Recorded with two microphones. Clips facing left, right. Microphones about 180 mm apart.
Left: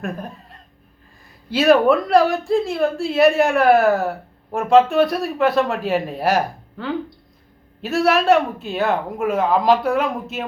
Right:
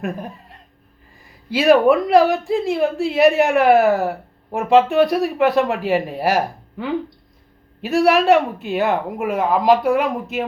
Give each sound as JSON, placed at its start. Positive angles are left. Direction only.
{"t": 1.5, "sound": "a woman's voice", "side_deg": -15}